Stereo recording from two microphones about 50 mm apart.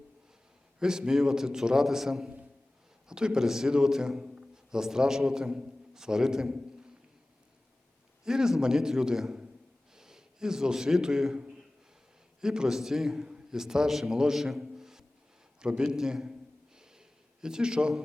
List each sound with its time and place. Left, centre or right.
0.8 s a man's voice: centre
8.2 s a man's voice: centre
12.4 s a man's voice: centre
14.6 s a sound: centre
15.6 s a man's voice: centre
17.4 s a man's voice: centre